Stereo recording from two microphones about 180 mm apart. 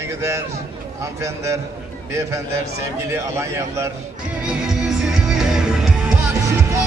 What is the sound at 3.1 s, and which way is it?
Speech, 15° right (ahead or behind).